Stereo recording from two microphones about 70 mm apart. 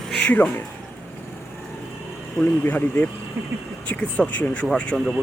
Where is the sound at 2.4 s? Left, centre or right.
Left.